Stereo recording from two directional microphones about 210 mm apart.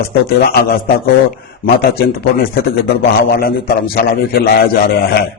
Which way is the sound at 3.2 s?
45° left (ahead or behind).